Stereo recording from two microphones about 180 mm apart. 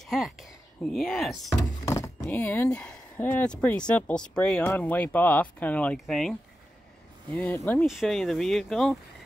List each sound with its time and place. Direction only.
0.0 s speech: centre (ahead or behind)
1.6 s a sound: 20° left (ahead or behind)
2.2 s speech: 10° left (ahead or behind)
7.8 s speech: centre (ahead or behind)